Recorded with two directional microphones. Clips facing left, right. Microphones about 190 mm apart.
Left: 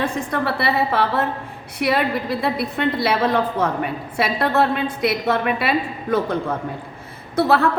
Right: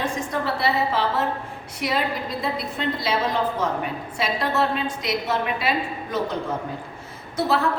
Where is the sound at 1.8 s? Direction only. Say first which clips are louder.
Left 5 dB; 65° left (ahead or behind).